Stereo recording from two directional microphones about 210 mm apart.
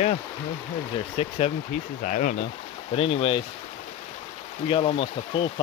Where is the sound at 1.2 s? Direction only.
30° left (ahead or behind).